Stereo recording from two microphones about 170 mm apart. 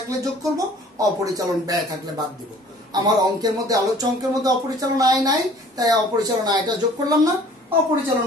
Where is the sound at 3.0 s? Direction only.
25° right (ahead or behind).